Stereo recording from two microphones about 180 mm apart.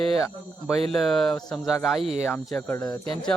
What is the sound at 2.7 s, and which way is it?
Speech, 20° left (ahead or behind).